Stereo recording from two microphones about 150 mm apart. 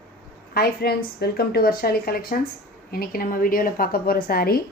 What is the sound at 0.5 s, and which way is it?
A woman's voice, 90° left.